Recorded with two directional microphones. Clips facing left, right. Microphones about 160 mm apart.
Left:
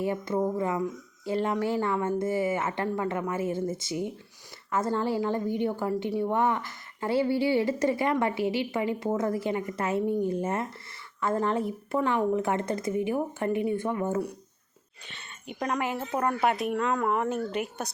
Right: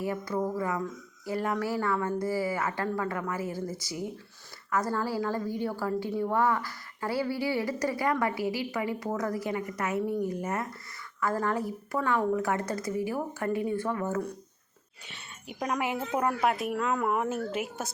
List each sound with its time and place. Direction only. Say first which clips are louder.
0.0 s a woman's voice: left 3 dB; 25° left (ahead or behind)
15.4 s speech: left 1 dB; 5° right (ahead or behind)